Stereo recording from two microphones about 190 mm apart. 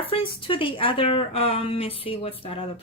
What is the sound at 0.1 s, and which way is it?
A woman's voice, 25° left (ahead or behind).